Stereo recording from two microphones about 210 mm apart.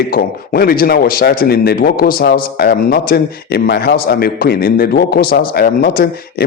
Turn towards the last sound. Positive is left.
turn(degrees=45)  # may be behind; listen again after turning